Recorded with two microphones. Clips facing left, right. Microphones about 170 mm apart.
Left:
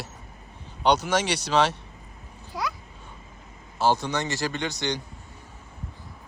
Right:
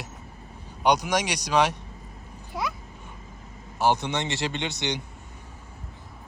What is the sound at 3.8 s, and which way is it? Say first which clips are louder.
A man's voice: even; 20° right (ahead or behind).